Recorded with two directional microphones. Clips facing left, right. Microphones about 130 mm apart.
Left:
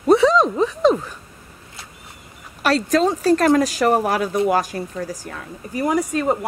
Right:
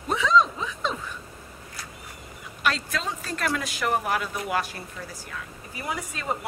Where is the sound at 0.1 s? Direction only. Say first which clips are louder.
Left 8 dB; 40° left (ahead or behind).